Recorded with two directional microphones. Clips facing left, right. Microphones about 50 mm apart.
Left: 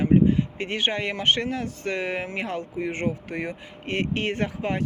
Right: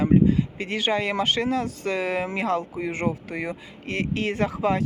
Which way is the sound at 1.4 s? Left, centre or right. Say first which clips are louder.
Right 3 dB; right.